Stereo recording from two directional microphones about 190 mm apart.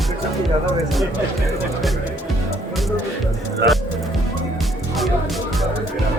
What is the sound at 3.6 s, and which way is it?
Speech, 60° right (ahead or behind).